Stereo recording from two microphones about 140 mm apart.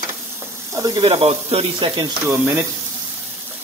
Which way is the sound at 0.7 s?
30° right (ahead or behind).